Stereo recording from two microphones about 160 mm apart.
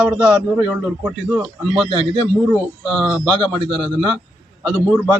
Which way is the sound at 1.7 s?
35° right (ahead or behind).